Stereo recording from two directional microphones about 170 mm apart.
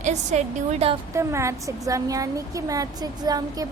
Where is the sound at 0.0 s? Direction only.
40° right (ahead or behind).